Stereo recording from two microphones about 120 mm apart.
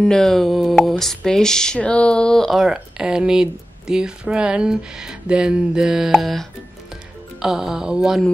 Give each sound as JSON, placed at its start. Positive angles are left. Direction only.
{"t": 0.0, "sound": "speech", "side_deg": 5}
{"t": 7.4, "sound": "speech", "side_deg": -5}